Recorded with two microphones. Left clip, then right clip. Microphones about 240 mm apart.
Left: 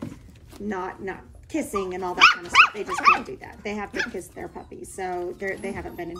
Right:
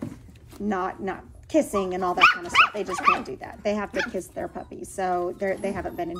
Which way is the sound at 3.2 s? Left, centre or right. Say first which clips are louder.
Right 5 dB; centre.